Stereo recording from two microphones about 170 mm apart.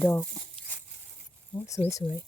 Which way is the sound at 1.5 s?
15° left (ahead or behind).